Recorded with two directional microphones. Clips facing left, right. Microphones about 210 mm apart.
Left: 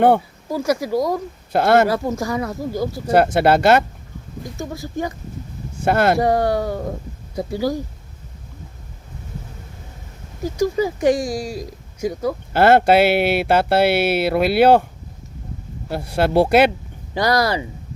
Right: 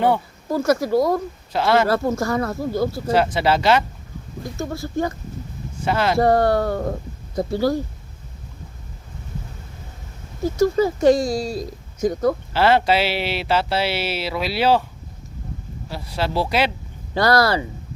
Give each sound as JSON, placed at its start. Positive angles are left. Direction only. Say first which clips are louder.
{"t": 0.5, "sound": "speech", "louder": "right 2 dB", "side_deg": 10}
{"t": 1.5, "sound": "speech", "louder": "left 4 dB", "side_deg": 50}
{"t": 1.9, "sound": "speech", "louder": "right 1 dB", "side_deg": 15}
{"t": 3.1, "sound": "speech", "louder": "left 5 dB", "side_deg": 55}
{"t": 4.5, "sound": "speech", "louder": "right 2 dB", "side_deg": 15}
{"t": 5.8, "sound": "speech", "louder": "left 4 dB", "side_deg": 55}
{"t": 6.1, "sound": "speech", "louder": "right 1 dB", "side_deg": 15}
{"t": 10.6, "sound": "speech", "louder": "right 2 dB", "side_deg": 15}
{"t": 12.5, "sound": "speech", "louder": "left 7 dB", "side_deg": 50}
{"t": 15.9, "sound": "speech", "louder": "left 6 dB", "side_deg": 55}
{"t": 17.2, "sound": "speech", "louder": "right 1 dB", "side_deg": 15}